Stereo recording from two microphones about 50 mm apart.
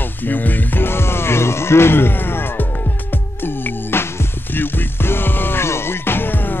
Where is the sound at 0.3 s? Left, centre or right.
Left.